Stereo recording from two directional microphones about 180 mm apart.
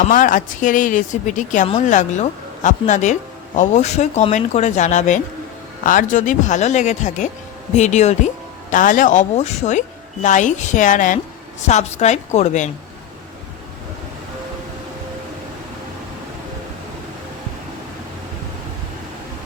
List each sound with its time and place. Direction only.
0.0 s speech: 45° left (ahead or behind)